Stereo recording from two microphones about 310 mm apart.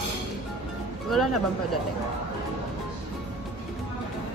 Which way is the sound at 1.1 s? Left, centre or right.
Centre.